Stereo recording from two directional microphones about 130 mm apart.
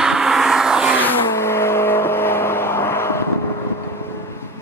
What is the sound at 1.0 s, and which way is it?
Vehicle, 20° left (ahead or behind).